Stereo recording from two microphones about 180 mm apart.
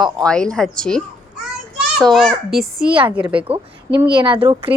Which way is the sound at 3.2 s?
30° right (ahead or behind).